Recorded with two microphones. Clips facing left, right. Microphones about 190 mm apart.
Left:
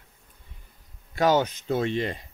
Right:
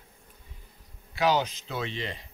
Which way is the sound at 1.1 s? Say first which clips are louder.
Left 4 dB; 50° left (ahead or behind).